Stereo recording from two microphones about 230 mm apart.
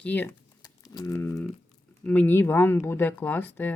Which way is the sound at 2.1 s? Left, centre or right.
Centre.